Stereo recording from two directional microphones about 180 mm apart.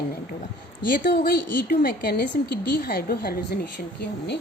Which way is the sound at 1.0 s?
65° left (ahead or behind).